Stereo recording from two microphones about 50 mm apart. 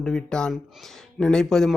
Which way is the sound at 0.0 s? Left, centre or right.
Centre.